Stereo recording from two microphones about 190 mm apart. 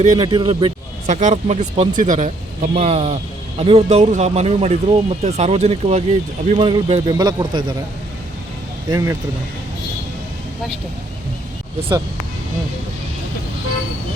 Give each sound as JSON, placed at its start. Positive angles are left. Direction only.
{"t": 0.1, "sound": "speech", "side_deg": -20}
{"t": 1.0, "sound": "speech", "side_deg": -40}
{"t": 8.9, "sound": "speech", "side_deg": -15}